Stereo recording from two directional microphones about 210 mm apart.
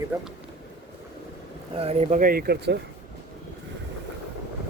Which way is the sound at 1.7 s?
30° right (ahead or behind).